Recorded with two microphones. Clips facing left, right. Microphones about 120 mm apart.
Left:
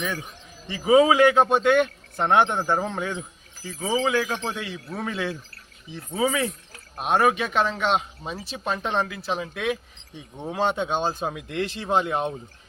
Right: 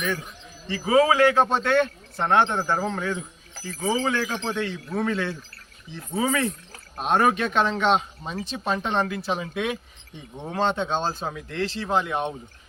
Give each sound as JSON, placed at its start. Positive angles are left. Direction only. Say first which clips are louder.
{"t": 0.7, "sound": "a man's voice", "louder": "left 2 dB", "side_deg": 20}
{"t": 3.8, "sound": "a man's voice", "louder": "left 1 dB", "side_deg": 5}